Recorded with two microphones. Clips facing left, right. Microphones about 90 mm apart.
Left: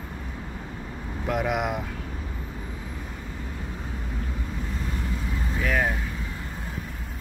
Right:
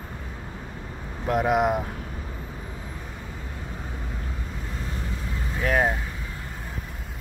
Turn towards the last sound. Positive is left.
turn(degrees=-35)  # may be behind; listen again after turning